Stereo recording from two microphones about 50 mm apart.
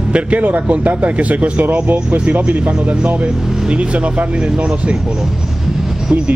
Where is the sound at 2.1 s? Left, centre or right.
Right.